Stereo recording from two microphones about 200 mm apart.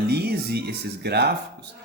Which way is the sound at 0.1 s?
50° right (ahead or behind).